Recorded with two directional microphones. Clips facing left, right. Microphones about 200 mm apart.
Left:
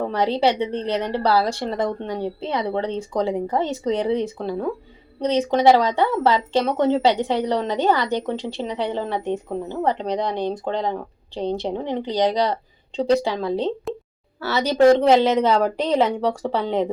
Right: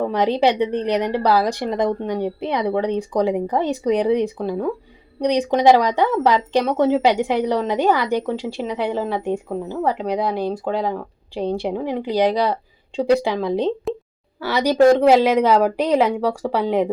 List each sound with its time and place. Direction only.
0.1 s speech: 15° right (ahead or behind)